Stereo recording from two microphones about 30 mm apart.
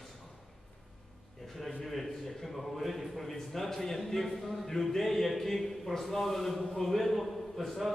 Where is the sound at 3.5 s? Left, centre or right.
Centre.